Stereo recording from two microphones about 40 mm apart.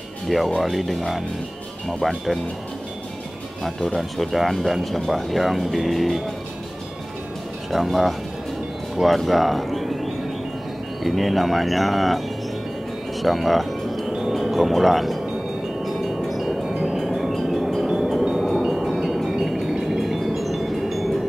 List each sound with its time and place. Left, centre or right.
0.6 s speech: centre
3.6 s speech: centre
7.7 s speech: centre
13.2 s music: centre
15.8 s ice cream truck: centre
16.6 s music: centre
17.3 s wind chime: centre
17.8 s a sound: centre
18.2 s vehicle: centre
18.6 s music: centre
18.9 s wind chime: centre
19.7 s a sound: centre
20.2 s wind chime: centre